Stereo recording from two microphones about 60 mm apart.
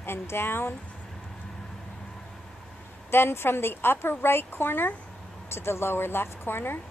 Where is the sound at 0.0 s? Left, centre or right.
Left.